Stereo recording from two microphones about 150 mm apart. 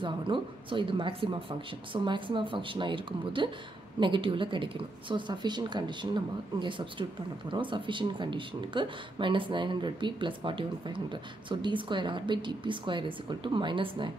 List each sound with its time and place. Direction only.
0.0 s a woman's voice: 35° right (ahead or behind)